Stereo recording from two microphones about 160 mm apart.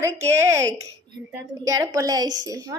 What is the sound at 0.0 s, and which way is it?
A woman's voice, 15° right (ahead or behind).